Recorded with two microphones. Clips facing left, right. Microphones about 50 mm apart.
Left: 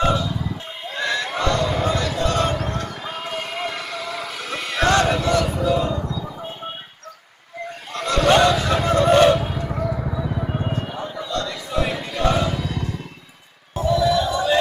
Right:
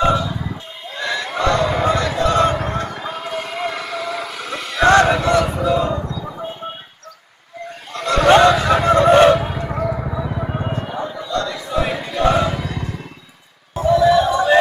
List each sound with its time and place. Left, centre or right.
0.0 s music: right
1.0 s a sound: right
1.5 s crowd: right
2.7 s basketball bounce: right
3.1 s basketball bounce: centre
3.6 s vehicle: centre
4.9 s music: right
7.9 s a sound: right
13.8 s music: right
14.2 s music: right